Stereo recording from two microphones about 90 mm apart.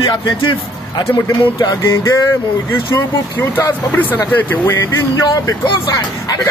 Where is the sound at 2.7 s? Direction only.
25° left (ahead or behind).